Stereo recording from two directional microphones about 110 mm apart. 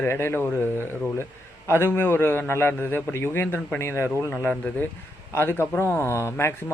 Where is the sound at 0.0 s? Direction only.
20° left (ahead or behind).